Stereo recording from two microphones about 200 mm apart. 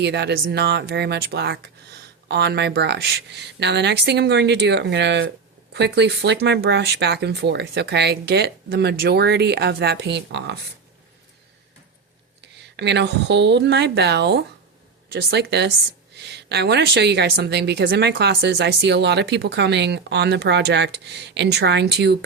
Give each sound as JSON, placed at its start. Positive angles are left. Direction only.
{"t": 0.0, "sound": "a woman's voice", "side_deg": -55}
{"t": 12.4, "sound": "a woman's voice", "side_deg": -60}